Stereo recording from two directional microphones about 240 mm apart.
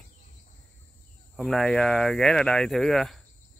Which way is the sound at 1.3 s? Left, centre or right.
Centre.